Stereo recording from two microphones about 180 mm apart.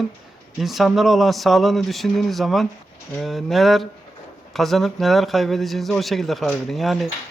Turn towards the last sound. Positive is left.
turn(degrees=0)  # may be behind; listen again after turning